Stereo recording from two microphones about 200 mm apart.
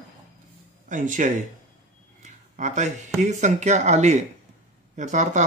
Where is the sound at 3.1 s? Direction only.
35° right (ahead or behind).